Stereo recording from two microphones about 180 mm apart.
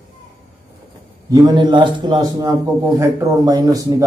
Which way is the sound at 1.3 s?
20° right (ahead or behind).